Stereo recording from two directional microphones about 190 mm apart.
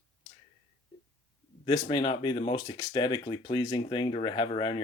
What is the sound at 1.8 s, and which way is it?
Speech, 25° left (ahead or behind).